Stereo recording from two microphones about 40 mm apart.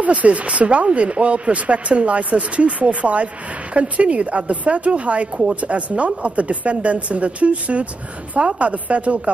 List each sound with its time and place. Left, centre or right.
0.0 s speech: right